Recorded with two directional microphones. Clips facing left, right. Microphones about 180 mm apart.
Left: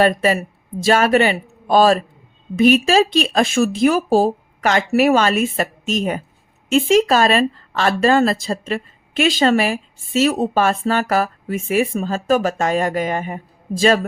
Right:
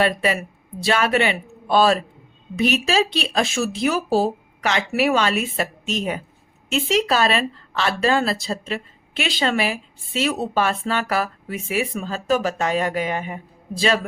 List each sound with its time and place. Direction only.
0.0 s speech: 45° left (ahead or behind)